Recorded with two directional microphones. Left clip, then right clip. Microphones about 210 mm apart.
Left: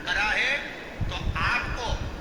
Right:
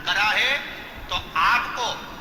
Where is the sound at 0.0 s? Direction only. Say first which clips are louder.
Right 4 dB; 20° right (ahead or behind).